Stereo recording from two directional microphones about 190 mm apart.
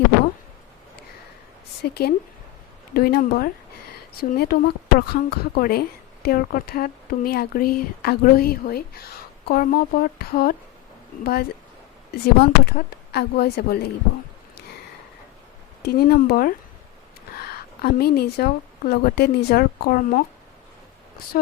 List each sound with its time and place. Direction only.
1.8 s speech: 55° left (ahead or behind)
15.8 s a woman's voice: 55° left (ahead or behind)